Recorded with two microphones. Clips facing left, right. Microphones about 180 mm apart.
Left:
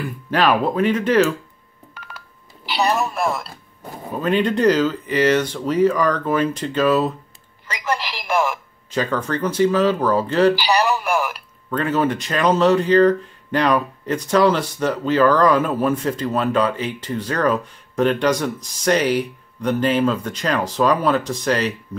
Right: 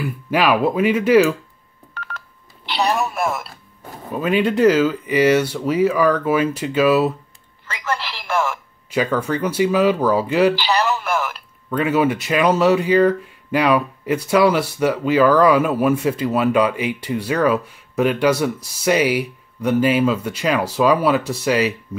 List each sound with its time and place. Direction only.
0.0 s speech: 10° right (ahead or behind)
2.0 s telephone dialing: 10° left (ahead or behind)
4.1 s speech: 10° right (ahead or behind)
7.6 s telephone: 15° left (ahead or behind)
8.9 s speech: 10° right (ahead or behind)
10.5 s speech: 15° left (ahead or behind)
11.7 s speech: 10° right (ahead or behind)